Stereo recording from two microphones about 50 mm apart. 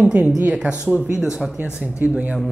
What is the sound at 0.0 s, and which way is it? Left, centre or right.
Speech, right.